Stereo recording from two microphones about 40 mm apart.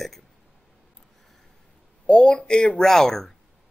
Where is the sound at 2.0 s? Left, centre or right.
Left; by 3.3 s centre.